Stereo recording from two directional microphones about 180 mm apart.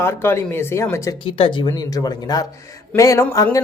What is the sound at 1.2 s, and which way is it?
Speech, 30° left (ahead or behind).